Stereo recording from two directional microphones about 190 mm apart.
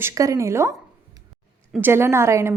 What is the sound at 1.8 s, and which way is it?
Speech, 10° right (ahead or behind).